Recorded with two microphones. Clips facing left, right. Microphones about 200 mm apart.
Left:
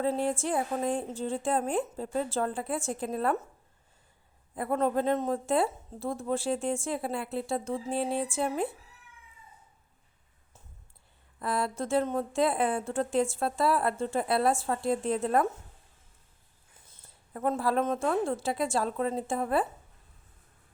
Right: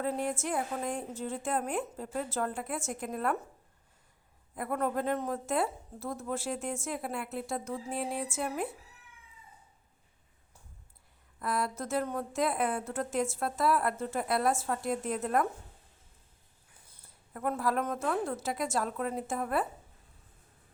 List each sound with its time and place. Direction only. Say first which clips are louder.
0.0 s a woman's voice: left 4 dB; 30° left (ahead or behind)
4.5 s speech: left 4 dB; 30° left (ahead or behind)
11.3 s speech: left 2 dB; 30° left (ahead or behind)
16.9 s speech: left 4 dB; 25° left (ahead or behind)